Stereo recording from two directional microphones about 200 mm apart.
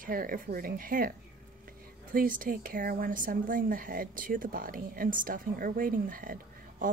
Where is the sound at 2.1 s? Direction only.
45° right (ahead or behind).